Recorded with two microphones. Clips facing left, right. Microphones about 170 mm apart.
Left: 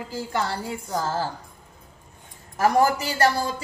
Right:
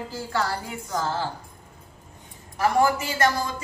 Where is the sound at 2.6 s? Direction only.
40° left (ahead or behind).